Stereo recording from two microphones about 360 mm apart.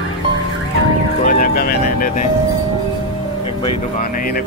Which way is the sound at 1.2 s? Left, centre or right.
Left.